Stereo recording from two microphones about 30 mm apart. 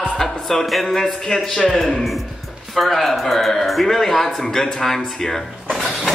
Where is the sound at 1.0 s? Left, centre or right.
Centre.